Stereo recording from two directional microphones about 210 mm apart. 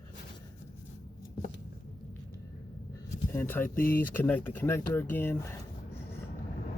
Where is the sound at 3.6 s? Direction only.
40° left (ahead or behind).